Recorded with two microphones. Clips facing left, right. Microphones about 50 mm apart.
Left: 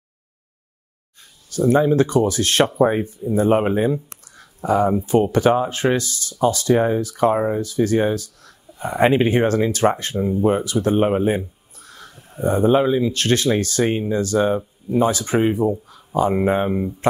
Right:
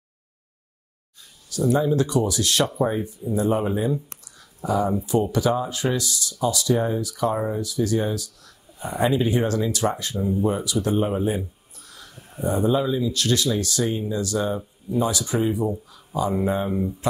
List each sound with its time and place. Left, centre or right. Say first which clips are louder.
1.7 s speech: left 5 dB; left
11.2 s a sound: left 5 dB; left
12.4 s speech: left 5 dB; left